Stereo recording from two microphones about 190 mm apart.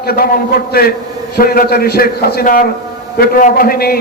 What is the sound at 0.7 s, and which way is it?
A man's voice, 55° left (ahead or behind).